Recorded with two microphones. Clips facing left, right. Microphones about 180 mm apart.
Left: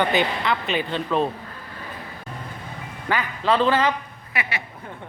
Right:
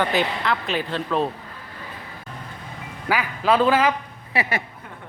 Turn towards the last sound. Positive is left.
turn(degrees=-30)  # may be behind; listen again after turning